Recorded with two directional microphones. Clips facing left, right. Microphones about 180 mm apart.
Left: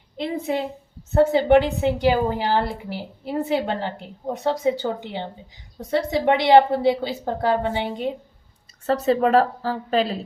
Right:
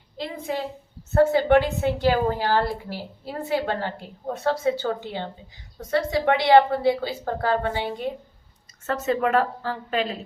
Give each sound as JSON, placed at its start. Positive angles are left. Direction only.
{"t": 0.2, "sound": "a woman's voice", "side_deg": 25}
{"t": 8.9, "sound": "speech", "side_deg": 35}